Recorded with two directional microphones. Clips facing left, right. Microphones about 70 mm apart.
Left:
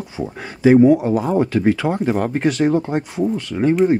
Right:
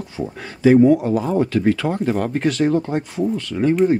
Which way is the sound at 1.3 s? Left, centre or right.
Centre.